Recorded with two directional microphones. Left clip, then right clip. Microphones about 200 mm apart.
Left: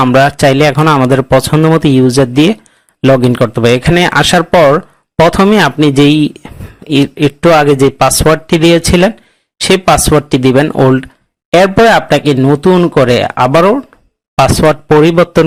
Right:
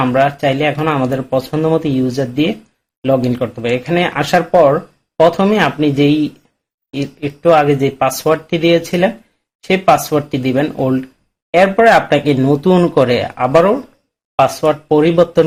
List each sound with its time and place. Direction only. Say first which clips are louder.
0.1 s a man's voice: left 6 dB; 45° left (ahead or behind)